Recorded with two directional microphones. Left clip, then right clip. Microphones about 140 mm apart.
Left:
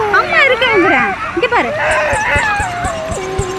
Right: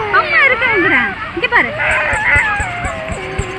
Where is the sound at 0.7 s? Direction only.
30° right (ahead or behind).